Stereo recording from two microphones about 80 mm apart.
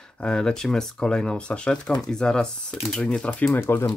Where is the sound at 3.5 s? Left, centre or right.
Left.